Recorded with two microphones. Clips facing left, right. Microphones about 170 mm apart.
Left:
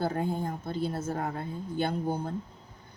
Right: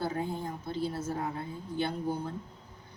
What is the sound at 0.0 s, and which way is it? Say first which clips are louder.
Speech: left 3 dB; 50° left (ahead or behind).